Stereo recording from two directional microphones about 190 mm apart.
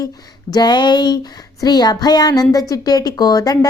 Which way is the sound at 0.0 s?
20° left (ahead or behind).